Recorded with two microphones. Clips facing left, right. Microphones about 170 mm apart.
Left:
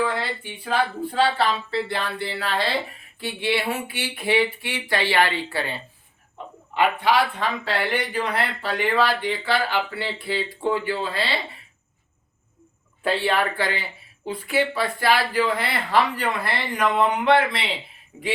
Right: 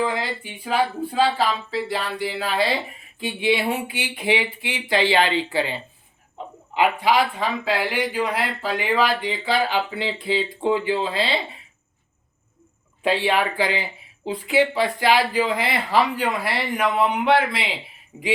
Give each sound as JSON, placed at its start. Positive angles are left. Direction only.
{"t": 0.0, "sound": "speech", "side_deg": -10}
{"t": 6.7, "sound": "speech", "side_deg": -10}
{"t": 13.0, "sound": "speech", "side_deg": -15}